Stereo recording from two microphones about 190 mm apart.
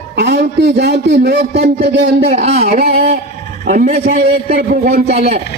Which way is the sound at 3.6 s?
45° right (ahead or behind).